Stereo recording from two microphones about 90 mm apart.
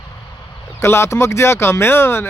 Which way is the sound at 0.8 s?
30° left (ahead or behind).